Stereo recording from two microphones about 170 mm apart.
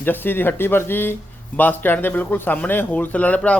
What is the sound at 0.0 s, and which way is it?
Speech, 10° left (ahead or behind).